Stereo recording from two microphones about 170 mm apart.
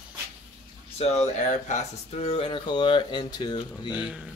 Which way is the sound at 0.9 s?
40° left (ahead or behind).